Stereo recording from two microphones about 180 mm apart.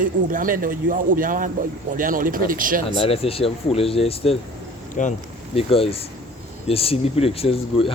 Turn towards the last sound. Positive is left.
turn(degrees=30)  # may be behind; listen again after turning